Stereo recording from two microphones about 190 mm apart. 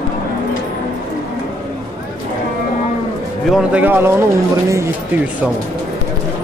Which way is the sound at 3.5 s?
5° right (ahead or behind).